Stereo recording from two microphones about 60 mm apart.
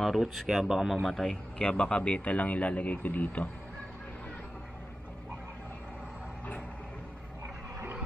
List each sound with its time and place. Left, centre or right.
0.0 s speech: centre
1.1 s speech: centre; by 3.4 s left